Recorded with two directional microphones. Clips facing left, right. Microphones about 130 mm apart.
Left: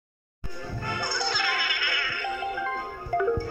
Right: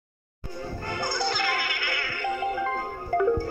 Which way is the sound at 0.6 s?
40° right (ahead or behind).